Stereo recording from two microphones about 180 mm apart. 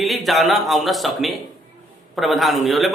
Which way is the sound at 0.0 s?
Centre (ahead or behind).